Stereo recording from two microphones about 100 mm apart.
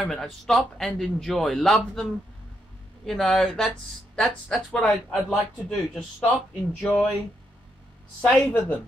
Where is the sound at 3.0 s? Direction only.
5° left (ahead or behind).